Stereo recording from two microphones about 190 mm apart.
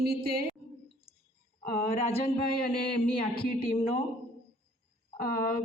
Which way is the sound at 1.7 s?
50° left (ahead or behind).